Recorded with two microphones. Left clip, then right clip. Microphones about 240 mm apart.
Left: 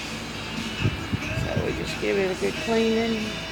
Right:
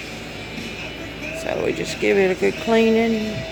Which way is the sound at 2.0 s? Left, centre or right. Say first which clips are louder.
Right 7 dB; right.